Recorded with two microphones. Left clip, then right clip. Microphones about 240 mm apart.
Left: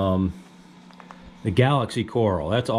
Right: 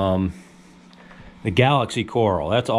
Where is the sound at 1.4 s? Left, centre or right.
Centre.